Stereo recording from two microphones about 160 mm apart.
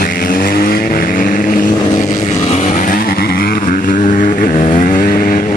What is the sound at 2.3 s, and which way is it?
Vehicle, 45° left (ahead or behind).